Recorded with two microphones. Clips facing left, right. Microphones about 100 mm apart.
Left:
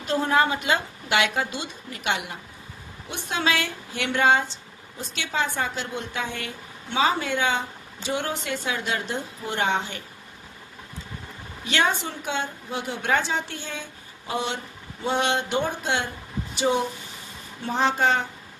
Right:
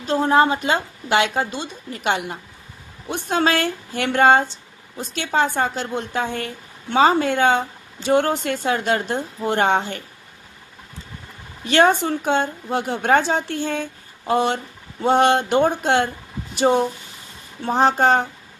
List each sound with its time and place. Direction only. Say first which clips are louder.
0.0 s a woman's voice: right 5 dB; 30° right (ahead or behind); by 10.0 s 50° right (ahead or behind)
11.7 s a woman's voice: right 8 dB; 45° right (ahead or behind)